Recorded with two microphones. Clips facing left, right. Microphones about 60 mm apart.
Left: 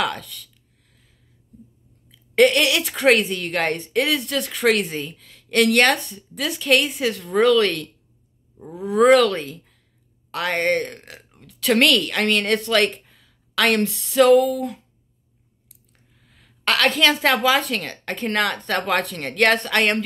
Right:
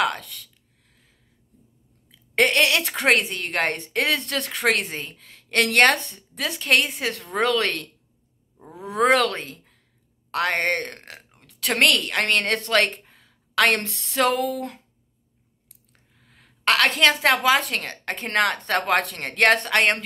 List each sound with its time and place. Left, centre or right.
0.0 s a sound: right
2.0 s a woman's voice: right
15.7 s a woman's voice: right